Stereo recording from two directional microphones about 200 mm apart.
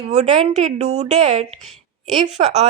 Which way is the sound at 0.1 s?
35° right (ahead or behind).